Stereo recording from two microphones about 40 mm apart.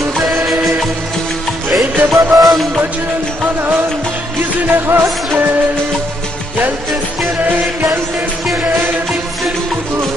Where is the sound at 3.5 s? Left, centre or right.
Right.